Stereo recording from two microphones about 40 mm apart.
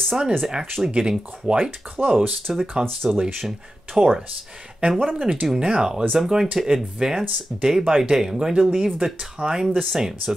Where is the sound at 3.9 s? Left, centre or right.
Centre.